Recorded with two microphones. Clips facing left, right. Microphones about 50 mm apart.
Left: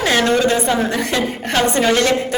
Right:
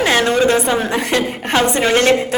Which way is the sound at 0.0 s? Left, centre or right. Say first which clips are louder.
Right 1 dB; right.